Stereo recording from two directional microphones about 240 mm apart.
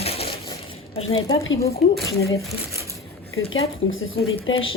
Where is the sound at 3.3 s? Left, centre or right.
Left.